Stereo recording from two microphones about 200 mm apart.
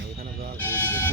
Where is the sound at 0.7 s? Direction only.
10° left (ahead or behind).